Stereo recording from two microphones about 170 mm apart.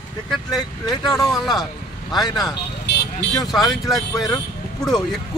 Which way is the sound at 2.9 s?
85° left.